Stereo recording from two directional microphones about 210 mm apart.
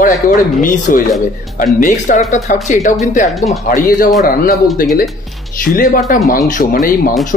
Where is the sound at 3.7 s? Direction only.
40° left (ahead or behind).